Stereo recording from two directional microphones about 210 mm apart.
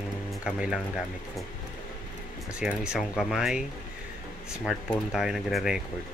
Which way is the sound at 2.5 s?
5° right (ahead or behind).